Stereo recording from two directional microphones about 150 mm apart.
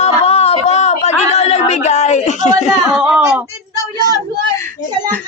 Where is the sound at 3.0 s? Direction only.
10° right (ahead or behind).